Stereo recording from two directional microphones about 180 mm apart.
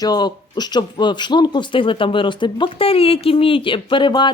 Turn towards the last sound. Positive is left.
turn(degrees=25)  # may be behind; listen again after turning